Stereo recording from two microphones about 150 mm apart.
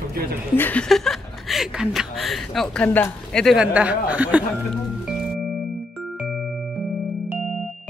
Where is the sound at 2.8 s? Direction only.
10° left (ahead or behind); by 4.4 s 10° right (ahead or behind).